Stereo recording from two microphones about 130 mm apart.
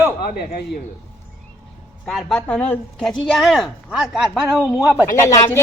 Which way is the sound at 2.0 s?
5° left (ahead or behind).